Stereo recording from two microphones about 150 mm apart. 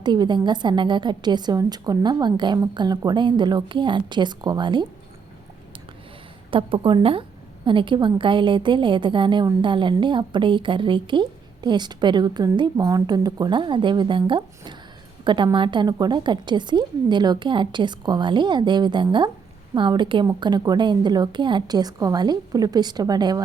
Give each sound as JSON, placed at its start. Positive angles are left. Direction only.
{"t": 0.0, "sound": "a woman's voice", "side_deg": -30}
{"t": 6.5, "sound": "a woman's voice", "side_deg": -35}